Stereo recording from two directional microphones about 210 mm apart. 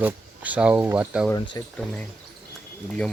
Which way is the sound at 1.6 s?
15° left (ahead or behind).